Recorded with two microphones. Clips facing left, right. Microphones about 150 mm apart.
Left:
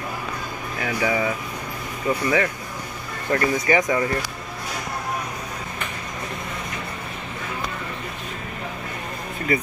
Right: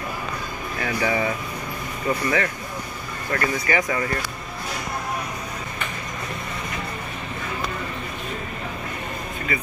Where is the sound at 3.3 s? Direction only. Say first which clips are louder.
Left 3 dB; 20° left (ahead or behind).